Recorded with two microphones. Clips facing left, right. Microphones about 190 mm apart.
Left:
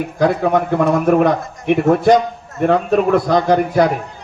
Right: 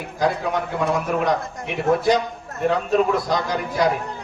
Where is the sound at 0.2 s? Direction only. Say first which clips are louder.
Left 7 dB; 55° left (ahead or behind).